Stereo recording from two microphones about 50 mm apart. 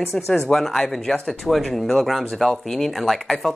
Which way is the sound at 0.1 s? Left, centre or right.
Centre.